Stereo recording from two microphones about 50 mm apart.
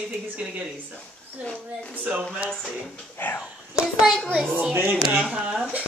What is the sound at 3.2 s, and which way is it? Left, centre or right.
Speech, left.